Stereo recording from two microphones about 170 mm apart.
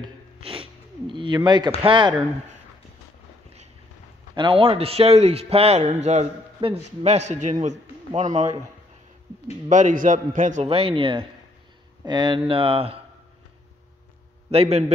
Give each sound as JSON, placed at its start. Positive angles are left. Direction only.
{"t": 0.0, "sound": "a sound", "side_deg": -30}
{"t": 1.9, "sound": "speech", "side_deg": -30}
{"t": 4.4, "sound": "a man's voice", "side_deg": -30}
{"t": 9.7, "sound": "a man's voice", "side_deg": -45}
{"t": 10.7, "sound": "a man's voice", "side_deg": -35}
{"t": 14.5, "sound": "a man's voice", "side_deg": -35}